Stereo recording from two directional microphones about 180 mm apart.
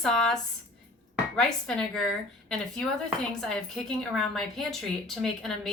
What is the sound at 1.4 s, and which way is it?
Speech, 5° left (ahead or behind).